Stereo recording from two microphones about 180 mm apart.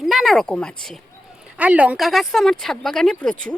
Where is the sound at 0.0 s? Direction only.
Centre (ahead or behind).